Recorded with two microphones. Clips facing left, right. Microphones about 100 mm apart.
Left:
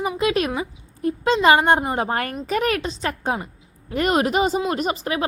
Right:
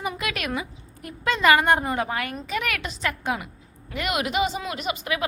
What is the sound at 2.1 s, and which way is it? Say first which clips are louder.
A woman's voice: left 5 dB; 45° left (ahead or behind).